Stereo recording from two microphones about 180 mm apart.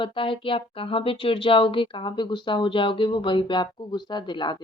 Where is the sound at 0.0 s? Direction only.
30° left (ahead or behind).